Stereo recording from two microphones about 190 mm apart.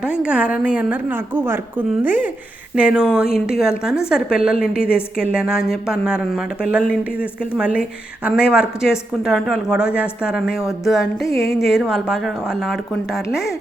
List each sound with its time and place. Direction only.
0.0 s a woman's voice: 5° right (ahead or behind)
4.7 s a woman's voice: 50° left (ahead or behind)
4.9 s a woman's voice: 5° right (ahead or behind)